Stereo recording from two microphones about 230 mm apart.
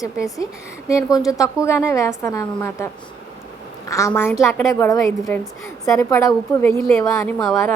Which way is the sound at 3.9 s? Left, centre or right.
Centre.